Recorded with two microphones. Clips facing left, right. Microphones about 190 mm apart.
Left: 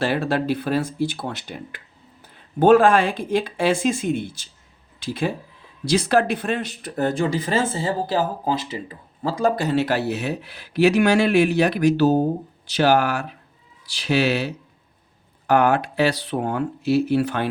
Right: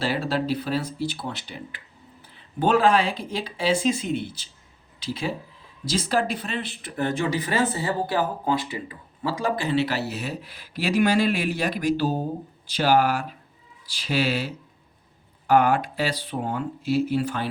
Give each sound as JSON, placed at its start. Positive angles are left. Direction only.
{"t": 0.0, "sound": "speech", "side_deg": 55}
{"t": 5.8, "sound": "speech", "side_deg": 65}
{"t": 7.3, "sound": "speech", "side_deg": 25}
{"t": 8.2, "sound": "speech", "side_deg": 35}